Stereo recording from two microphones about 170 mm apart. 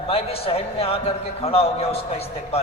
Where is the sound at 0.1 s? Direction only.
35° left (ahead or behind).